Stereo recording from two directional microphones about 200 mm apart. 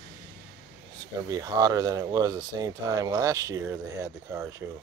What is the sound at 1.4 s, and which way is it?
Speech, 20° right (ahead or behind).